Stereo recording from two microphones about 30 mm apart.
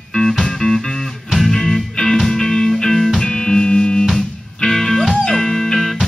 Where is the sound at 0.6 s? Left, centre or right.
Left.